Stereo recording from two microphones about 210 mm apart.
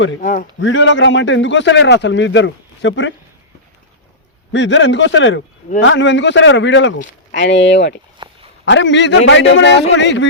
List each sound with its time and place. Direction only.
0.2 s a man's voice: 40° left (ahead or behind)
0.6 s a man's voice: 65° left (ahead or behind)
4.5 s a man's voice: 60° left (ahead or behind)
8.2 s a sound: 25° right (ahead or behind)
8.6 s a man's voice: 60° left (ahead or behind)